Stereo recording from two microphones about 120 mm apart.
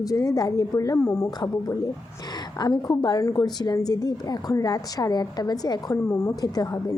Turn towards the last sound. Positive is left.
turn(degrees=30)  # may be behind; listen again after turning